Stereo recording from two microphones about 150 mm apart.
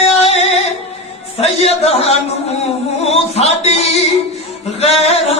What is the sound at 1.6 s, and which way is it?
Music, 45° left (ahead or behind).